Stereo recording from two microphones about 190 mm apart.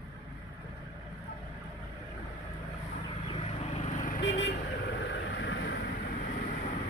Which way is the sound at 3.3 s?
35° left (ahead or behind).